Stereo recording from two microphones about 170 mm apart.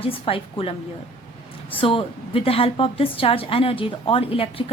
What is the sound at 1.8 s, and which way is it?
A woman's voice, 30° left (ahead or behind).